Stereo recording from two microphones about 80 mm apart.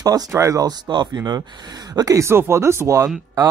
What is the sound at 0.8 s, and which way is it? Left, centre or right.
Speech, right.